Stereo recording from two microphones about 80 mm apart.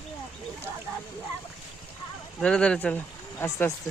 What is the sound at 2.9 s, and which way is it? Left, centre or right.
Speech, left.